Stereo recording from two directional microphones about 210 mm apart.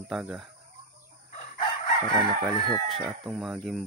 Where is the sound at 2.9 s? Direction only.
Centre (ahead or behind).